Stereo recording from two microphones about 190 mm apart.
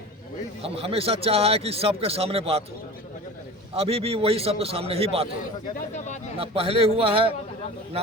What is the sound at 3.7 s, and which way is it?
A man's voice, 30° right (ahead or behind).